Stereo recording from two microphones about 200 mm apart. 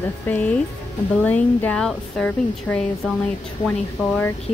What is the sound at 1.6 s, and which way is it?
Speech, 5° left (ahead or behind).